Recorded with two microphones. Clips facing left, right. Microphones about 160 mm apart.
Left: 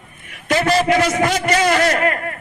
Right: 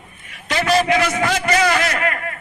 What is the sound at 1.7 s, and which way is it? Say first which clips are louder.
Speech: left 4 dB; 40° left (ahead or behind).